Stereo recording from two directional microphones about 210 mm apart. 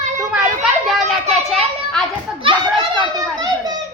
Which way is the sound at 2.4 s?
25° right (ahead or behind).